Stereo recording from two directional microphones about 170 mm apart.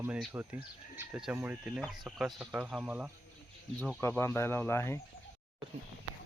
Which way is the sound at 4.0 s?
15° left (ahead or behind).